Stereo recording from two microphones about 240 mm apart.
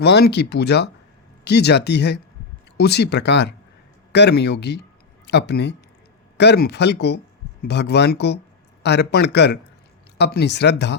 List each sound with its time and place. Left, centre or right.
0.0 s speech: left